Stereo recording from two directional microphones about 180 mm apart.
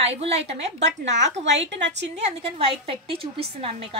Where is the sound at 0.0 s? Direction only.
35° right (ahead or behind).